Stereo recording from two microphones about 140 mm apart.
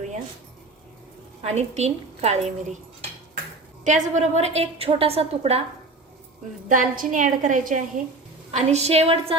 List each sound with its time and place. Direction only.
1.4 s a woman's voice: 50° right (ahead or behind)
6.7 s a woman's voice: 75° right (ahead or behind)
8.5 s a woman's voice: 50° right (ahead or behind)